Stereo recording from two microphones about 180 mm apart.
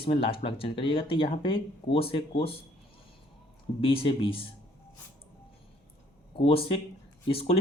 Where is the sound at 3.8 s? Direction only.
30° left (ahead or behind).